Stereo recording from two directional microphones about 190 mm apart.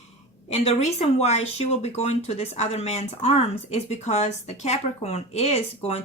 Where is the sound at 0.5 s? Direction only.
35° left (ahead or behind).